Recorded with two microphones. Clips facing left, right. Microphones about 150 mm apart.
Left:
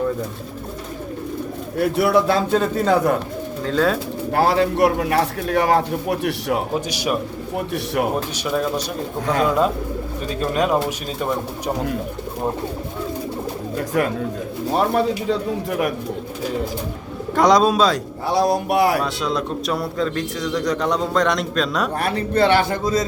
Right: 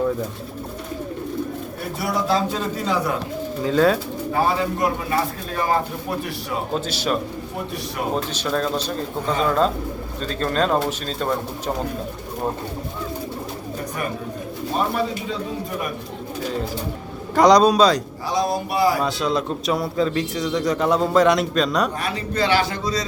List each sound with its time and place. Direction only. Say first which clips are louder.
2.0 s speech: left 4 dB; 60° left (ahead or behind)
3.6 s speech: right 2 dB; 5° right (ahead or behind)
4.3 s speech: left 4 dB; 75° left (ahead or behind)
6.7 s speech: left 1 dB; 15° left (ahead or behind)
9.2 s speech: left 3 dB; 80° left
10.2 s speech: left 1 dB; 10° left (ahead or behind)
13.7 s bird: left 8 dB; 90° left
14.8 s speech: left 4 dB; 70° left (ahead or behind)
17.3 s speech: right 1 dB; centre (ahead or behind)
18.3 s speech: left 4 dB; 65° left (ahead or behind)
19.0 s speech: right 1 dB; centre (ahead or behind)
21.9 s speech: left 5 dB; 60° left (ahead or behind)